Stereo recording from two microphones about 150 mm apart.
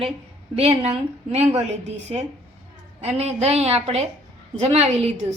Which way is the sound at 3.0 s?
45° right (ahead or behind).